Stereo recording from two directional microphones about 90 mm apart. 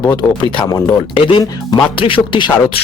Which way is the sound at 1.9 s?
75° left (ahead or behind).